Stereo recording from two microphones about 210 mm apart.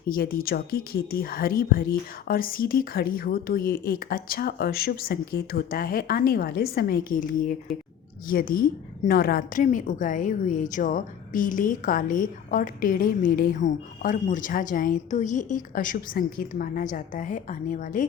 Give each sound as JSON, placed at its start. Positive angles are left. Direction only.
{"t": 0.1, "sound": "a woman's voice", "side_deg": 45}